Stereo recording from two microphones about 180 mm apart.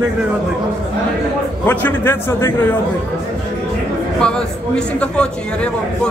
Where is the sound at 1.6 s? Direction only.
10° left (ahead or behind).